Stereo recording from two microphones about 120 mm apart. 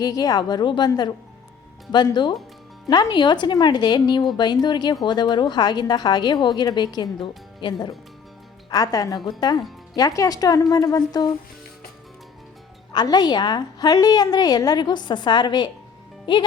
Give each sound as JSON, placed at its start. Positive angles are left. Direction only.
{"t": 0.0, "sound": "a woman's voice", "side_deg": 30}
{"t": 2.9, "sound": "a woman's voice", "side_deg": 40}
{"t": 12.9, "sound": "a woman's voice", "side_deg": 35}